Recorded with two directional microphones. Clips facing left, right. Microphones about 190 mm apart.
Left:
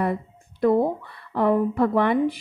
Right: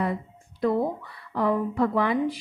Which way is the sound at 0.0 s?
55° left (ahead or behind).